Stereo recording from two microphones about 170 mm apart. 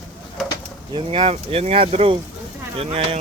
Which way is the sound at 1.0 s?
35° right (ahead or behind).